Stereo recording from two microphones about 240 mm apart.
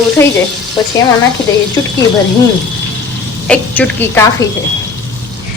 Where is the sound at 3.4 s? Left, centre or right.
Centre.